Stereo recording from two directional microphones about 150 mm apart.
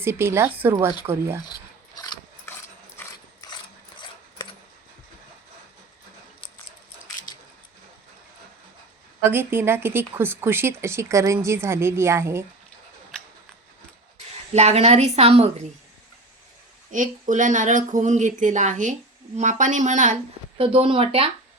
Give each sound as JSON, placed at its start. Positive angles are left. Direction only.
{"t": 0.0, "sound": "speech", "side_deg": -15}
{"t": 2.5, "sound": "dog", "side_deg": 15}
{"t": 3.4, "sound": "mechanisms", "side_deg": 25}
{"t": 9.3, "sound": "speech", "side_deg": -15}
{"t": 14.5, "sound": "a woman's voice", "side_deg": -45}
{"t": 16.9, "sound": "speech", "side_deg": -60}
{"t": 20.6, "sound": "speech", "side_deg": -40}